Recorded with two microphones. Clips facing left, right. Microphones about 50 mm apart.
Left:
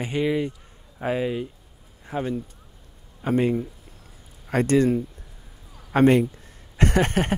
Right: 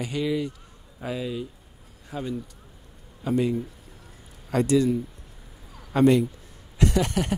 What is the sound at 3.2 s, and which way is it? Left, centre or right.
Speech, left.